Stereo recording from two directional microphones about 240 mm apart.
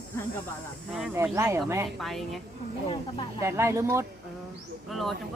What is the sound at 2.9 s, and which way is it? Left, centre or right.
Speech, left.